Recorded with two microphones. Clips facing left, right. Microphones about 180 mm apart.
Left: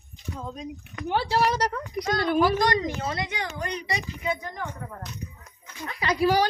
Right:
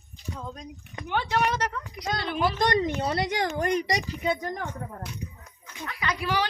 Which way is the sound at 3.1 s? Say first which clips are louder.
Right 4 dB; 45° right (ahead or behind).